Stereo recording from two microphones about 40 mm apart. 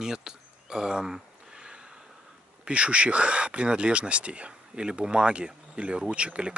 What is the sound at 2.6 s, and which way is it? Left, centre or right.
Speech, right.